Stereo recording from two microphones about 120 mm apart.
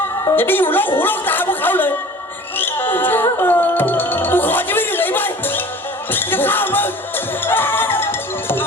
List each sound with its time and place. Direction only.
0.3 s a woman's voice: 15° left (ahead or behind)
2.6 s music: 15° left (ahead or behind)